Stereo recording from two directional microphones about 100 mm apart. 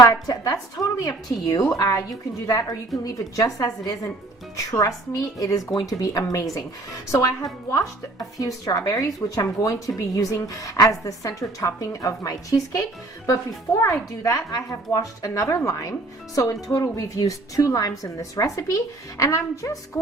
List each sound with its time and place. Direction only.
0.0 s speech: 35° left (ahead or behind)